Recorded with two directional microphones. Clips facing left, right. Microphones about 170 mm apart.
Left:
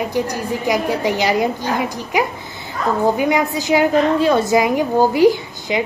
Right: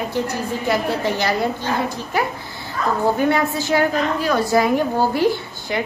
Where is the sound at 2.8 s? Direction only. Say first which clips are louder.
Left 2 dB; 20° left (ahead or behind).